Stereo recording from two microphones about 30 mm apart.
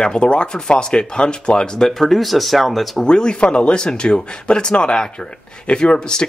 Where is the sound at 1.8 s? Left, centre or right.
Centre.